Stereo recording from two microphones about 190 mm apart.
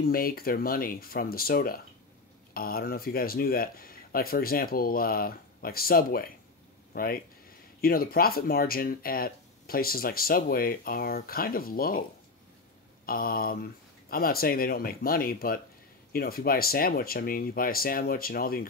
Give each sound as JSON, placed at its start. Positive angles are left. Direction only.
{"t": 0.0, "sound": "speech", "side_deg": 50}
{"t": 13.0, "sound": "speech", "side_deg": 50}